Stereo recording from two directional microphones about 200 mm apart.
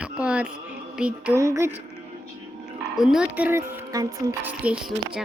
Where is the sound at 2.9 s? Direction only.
5° right (ahead or behind).